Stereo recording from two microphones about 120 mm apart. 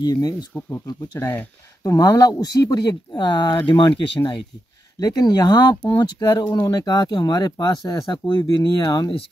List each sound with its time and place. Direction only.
0.0 s speech: 35° left (ahead or behind)
5.0 s speech: 30° left (ahead or behind)